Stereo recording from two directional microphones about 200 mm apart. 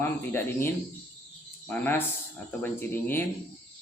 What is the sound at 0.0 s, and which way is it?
A man's voice, 10° left (ahead or behind).